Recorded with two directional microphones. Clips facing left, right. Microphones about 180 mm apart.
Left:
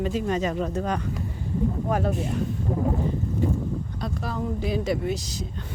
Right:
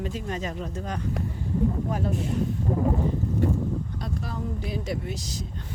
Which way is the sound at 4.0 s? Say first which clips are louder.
Left 3 dB; 90° left.